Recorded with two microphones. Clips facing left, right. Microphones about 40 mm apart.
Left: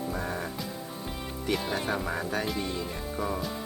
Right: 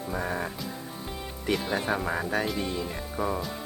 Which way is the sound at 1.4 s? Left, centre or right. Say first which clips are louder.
Right 2 dB; centre.